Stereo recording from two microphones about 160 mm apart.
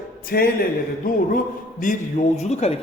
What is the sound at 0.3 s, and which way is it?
Speech, 70° left (ahead or behind).